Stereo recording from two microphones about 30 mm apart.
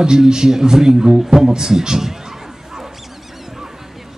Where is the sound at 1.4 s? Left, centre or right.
Centre.